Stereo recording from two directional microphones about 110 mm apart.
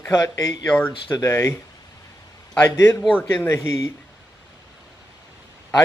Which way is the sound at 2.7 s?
20° left (ahead or behind).